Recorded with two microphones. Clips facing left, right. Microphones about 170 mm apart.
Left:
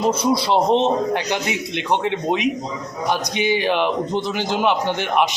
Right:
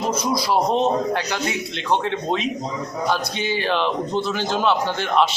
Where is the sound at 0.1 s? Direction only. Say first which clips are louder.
Left 3 dB; 30° left (ahead or behind).